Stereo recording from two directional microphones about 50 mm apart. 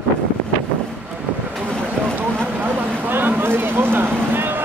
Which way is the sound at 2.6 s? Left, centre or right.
Right.